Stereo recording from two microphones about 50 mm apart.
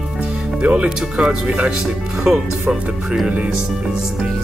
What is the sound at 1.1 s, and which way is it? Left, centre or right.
Speech, centre.